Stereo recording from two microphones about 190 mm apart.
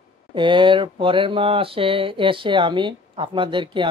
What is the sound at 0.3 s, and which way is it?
Speech, 25° right (ahead or behind).